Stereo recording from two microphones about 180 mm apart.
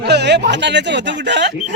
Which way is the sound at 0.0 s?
70° right (ahead or behind).